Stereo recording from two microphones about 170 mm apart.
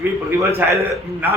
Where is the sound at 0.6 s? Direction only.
10° right (ahead or behind).